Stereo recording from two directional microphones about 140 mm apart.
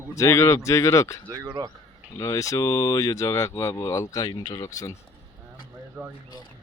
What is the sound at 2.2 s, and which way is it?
Speech, 25° left (ahead or behind).